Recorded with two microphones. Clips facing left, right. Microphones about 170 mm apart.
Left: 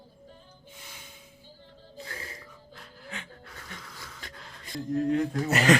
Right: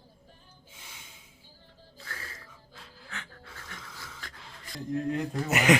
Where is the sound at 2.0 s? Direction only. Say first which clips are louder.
Left 4 dB; 20° left (ahead or behind).